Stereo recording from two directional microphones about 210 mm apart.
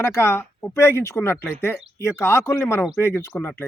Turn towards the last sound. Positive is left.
turn(degrees=10)  # may be behind; listen again after turning